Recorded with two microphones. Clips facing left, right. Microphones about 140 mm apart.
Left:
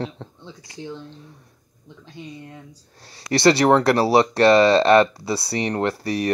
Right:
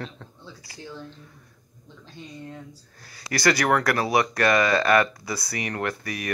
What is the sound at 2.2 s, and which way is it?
Speech, 15° left (ahead or behind).